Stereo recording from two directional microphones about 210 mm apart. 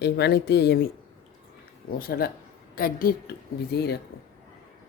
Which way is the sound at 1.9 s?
45° left (ahead or behind).